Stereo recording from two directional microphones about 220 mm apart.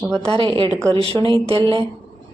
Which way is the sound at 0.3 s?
20° right (ahead or behind).